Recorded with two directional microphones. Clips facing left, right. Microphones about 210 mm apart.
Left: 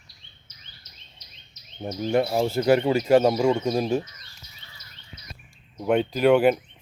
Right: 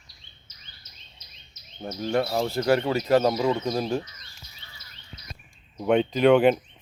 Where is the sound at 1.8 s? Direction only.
20° left (ahead or behind).